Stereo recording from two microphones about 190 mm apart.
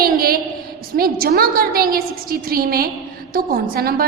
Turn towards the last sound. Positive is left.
turn(degrees=-50)  # may be behind; listen again after turning